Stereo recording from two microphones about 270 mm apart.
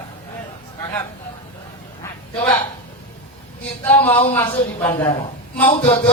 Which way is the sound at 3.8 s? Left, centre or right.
Centre.